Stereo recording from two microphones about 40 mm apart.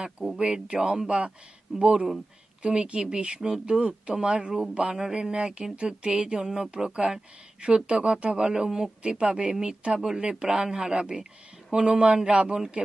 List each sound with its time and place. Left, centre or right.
0.4 s speech: right
6.4 s speech: centre